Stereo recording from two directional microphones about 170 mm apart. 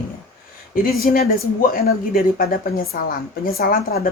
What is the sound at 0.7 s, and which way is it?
Speech, 60° left (ahead or behind).